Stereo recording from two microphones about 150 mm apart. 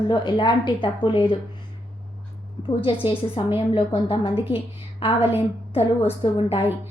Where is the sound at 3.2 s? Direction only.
35° left (ahead or behind).